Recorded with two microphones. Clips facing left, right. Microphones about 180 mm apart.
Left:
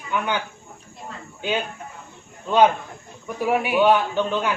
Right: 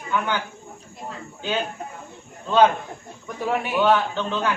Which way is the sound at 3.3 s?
10° left (ahead or behind).